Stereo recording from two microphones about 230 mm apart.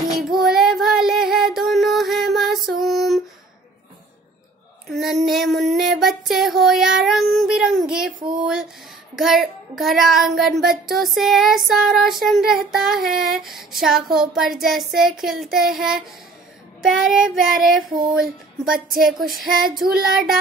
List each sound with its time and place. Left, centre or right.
0.4 s female singing: centre
4.8 s child singing: centre
8.4 s a sound: centre
9.1 s child singing: centre
19.1 s female singing: right
20.0 s child singing: centre